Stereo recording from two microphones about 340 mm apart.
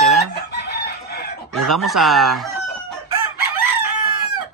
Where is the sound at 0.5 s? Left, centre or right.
Left.